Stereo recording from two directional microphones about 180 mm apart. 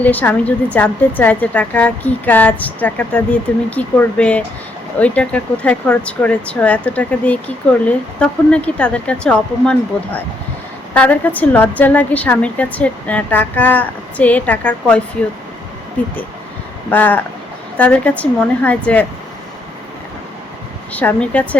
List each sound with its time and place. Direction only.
0.0 s speech: 10° left (ahead or behind)
16.9 s speech: 10° left (ahead or behind)
20.9 s speech: 10° left (ahead or behind)